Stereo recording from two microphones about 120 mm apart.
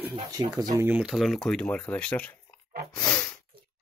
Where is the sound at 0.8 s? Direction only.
10° right (ahead or behind).